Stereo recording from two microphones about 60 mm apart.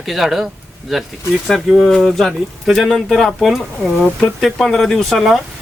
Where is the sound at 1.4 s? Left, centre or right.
Centre.